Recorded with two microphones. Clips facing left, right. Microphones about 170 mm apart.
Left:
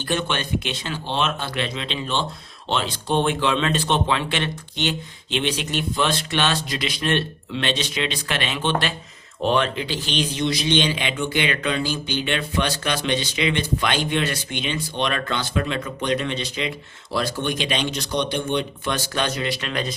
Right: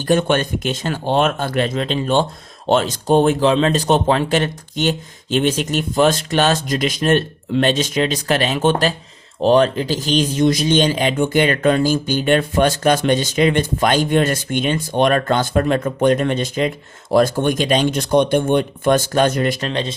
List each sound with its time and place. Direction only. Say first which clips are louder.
0.0 s a man's voice: right 9 dB; 45° right (ahead or behind)